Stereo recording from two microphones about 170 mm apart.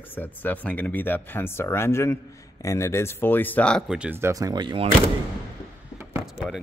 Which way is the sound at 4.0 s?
10° right (ahead or behind).